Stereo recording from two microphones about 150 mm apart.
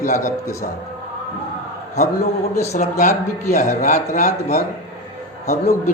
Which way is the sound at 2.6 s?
50° left (ahead or behind).